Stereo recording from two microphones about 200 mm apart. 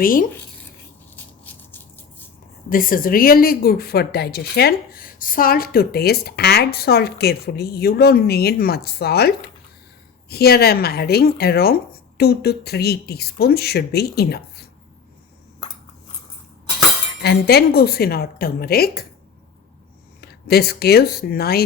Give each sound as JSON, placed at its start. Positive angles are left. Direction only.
{"t": 0.0, "sound": "speech", "side_deg": 45}
{"t": 1.1, "sound": "a sound", "side_deg": 10}
{"t": 2.6, "sound": "speech", "side_deg": 45}
{"t": 17.2, "sound": "speech", "side_deg": 50}
{"t": 20.2, "sound": "speech", "side_deg": 50}